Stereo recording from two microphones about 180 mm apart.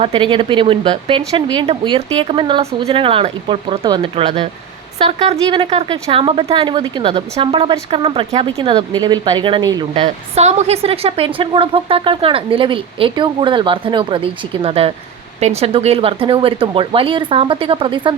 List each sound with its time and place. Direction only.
0.0 s speech: 30° right (ahead or behind)